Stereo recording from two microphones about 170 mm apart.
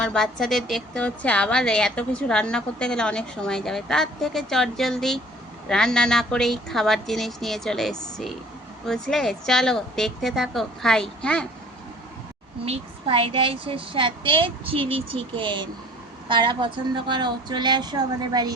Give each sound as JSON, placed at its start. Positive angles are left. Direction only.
{"t": 0.0, "sound": "a woman's voice", "side_deg": 5}
{"t": 12.6, "sound": "a woman's voice", "side_deg": -35}